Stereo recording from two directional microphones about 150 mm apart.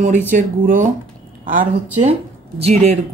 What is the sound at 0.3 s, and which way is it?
Speech, 60° right (ahead or behind).